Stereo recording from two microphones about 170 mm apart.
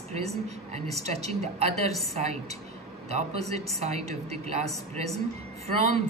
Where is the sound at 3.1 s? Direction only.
40° right (ahead or behind).